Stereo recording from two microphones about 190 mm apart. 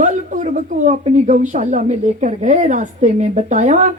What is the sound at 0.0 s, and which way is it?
A woman's voice, 40° right (ahead or behind).